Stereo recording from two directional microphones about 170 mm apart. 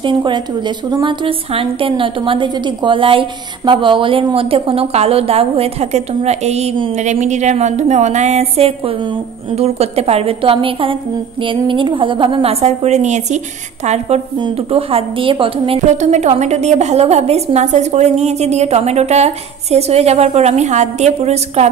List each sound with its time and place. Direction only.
0.0 s a woman's voice: 30° right (ahead or behind)